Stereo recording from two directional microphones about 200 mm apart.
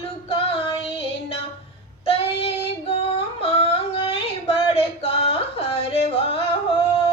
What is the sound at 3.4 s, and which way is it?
Yodeling, 30° left (ahead or behind).